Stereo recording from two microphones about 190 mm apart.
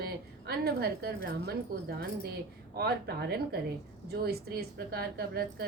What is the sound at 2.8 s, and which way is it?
A woman's voice, 55° right (ahead or behind).